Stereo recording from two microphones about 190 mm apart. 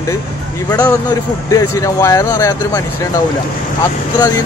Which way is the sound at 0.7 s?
15° left (ahead or behind).